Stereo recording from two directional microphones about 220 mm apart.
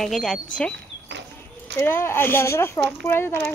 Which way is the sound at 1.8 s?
10° left (ahead or behind).